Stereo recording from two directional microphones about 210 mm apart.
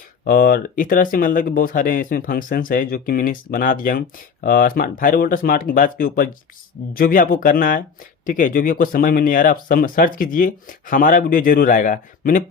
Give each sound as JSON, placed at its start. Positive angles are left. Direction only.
{"t": 0.3, "sound": "speech", "side_deg": 45}